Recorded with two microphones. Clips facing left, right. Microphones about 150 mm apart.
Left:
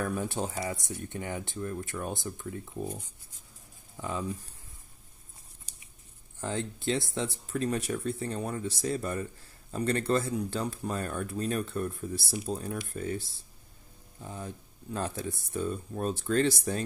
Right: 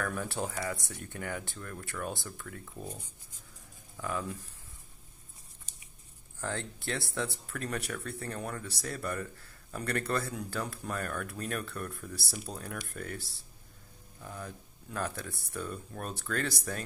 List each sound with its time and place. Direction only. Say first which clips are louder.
0.0 s speech: left 3 dB; 20° left (ahead or behind)
6.4 s speech: left 5 dB; 15° left (ahead or behind)